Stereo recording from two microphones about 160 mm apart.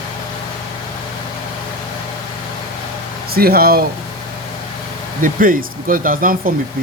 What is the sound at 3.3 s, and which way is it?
Speech, 70° right (ahead or behind).